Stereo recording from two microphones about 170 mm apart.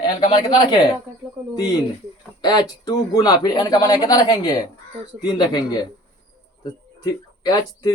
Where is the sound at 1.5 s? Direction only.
20° left (ahead or behind).